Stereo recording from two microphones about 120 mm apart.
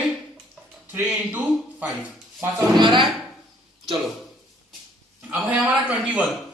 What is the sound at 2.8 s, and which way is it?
Speech, 40° right (ahead or behind).